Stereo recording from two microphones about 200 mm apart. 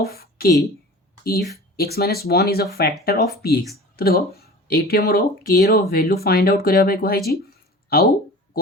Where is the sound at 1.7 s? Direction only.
50° left (ahead or behind).